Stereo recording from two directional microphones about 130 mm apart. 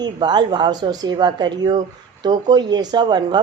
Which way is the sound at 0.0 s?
35° right (ahead or behind).